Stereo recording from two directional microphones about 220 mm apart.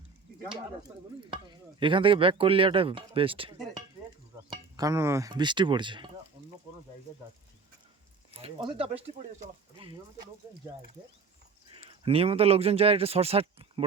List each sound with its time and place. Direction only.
1.5 s speech: 20° right (ahead or behind)
6.4 s sizzle: 25° right (ahead or behind)
8.4 s speech: 25° right (ahead or behind)
11.7 s speech: 25° right (ahead or behind)